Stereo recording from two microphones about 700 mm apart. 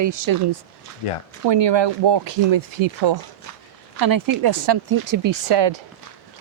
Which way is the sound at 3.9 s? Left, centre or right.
Right.